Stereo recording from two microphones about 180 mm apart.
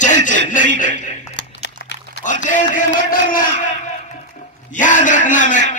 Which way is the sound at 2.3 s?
45° left (ahead or behind).